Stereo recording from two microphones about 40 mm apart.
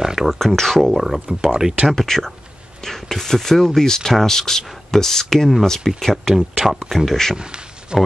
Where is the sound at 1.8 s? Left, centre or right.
Centre.